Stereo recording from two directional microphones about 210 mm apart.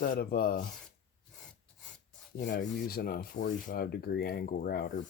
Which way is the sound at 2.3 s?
45° left (ahead or behind).